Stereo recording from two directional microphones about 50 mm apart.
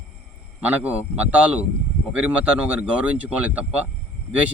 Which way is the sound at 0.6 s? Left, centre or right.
Right.